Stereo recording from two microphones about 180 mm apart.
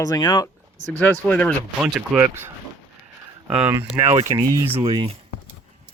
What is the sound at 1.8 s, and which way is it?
Speech, 5° right (ahead or behind).